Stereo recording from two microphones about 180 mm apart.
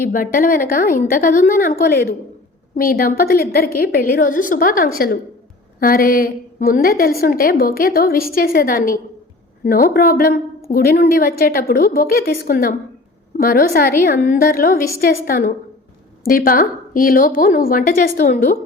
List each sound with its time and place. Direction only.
0.0 s a woman's voice: 50° left (ahead or behind)